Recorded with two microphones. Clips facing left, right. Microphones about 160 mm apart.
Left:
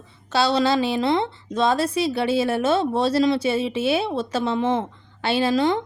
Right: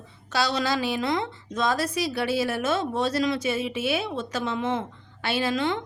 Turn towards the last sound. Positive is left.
turn(degrees=35)  # may be behind; listen again after turning